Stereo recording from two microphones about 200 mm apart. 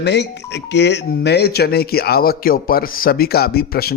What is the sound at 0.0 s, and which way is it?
Speech, 60° left (ahead or behind).